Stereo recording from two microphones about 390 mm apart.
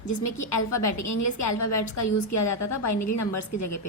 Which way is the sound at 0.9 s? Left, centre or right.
Left.